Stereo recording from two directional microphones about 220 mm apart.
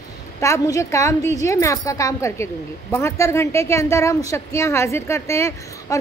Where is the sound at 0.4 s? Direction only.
15° left (ahead or behind).